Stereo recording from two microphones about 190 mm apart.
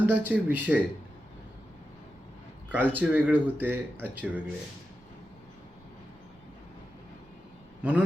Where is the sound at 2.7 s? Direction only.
10° right (ahead or behind).